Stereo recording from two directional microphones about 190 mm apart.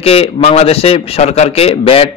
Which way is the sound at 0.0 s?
30° left (ahead or behind).